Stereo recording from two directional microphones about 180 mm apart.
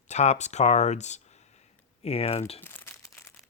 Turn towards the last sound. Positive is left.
turn(degrees=15)  # may be behind; listen again after turning